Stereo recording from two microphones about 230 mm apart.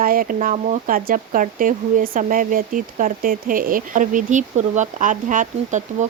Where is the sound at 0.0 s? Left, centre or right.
Right.